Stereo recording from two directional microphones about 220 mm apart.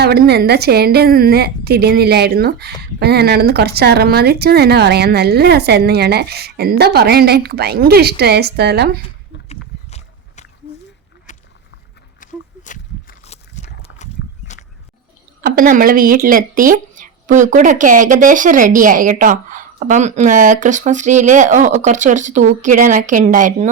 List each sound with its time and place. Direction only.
0.0 s speech: 45° right (ahead or behind)
9.5 s a sound: 30° left (ahead or behind)
13.8 s walk: 30° left (ahead or behind)
15.4 s speech: 40° right (ahead or behind)